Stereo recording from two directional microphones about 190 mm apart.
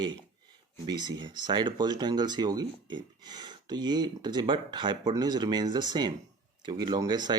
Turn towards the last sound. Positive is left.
turn(degrees=-20)  # may be behind; listen again after turning